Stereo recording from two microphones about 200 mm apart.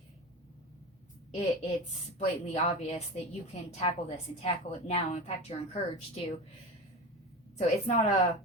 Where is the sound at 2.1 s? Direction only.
35° left (ahead or behind).